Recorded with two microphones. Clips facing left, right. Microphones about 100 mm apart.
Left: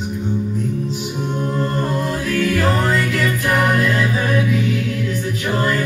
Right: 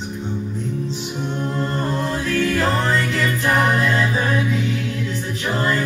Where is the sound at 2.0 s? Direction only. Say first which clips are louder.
Left 1 dB; 25° right (ahead or behind).